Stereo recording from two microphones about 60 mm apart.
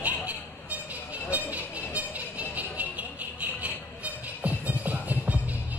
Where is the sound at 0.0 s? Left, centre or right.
Right.